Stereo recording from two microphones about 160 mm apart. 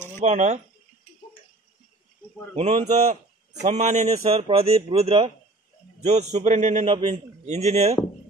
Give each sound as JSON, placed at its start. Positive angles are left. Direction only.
{"t": 0.2, "sound": "a man's voice", "side_deg": -45}
{"t": 2.5, "sound": "a man's voice", "side_deg": -40}
{"t": 6.0, "sound": "a man's voice", "side_deg": -45}